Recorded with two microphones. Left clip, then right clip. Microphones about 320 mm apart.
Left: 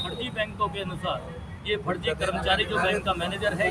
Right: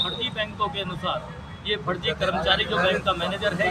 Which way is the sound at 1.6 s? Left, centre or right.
Centre.